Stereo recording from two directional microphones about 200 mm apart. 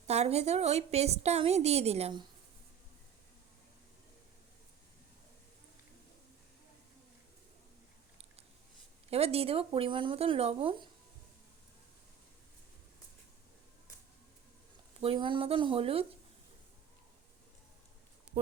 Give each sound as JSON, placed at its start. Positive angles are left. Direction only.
{"t": 0.1, "sound": "a woman's voice", "side_deg": -30}
{"t": 9.0, "sound": "speech", "side_deg": -30}
{"t": 15.0, "sound": "speech", "side_deg": -25}